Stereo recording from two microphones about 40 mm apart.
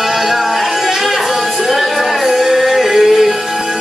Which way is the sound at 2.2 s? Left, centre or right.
Centre.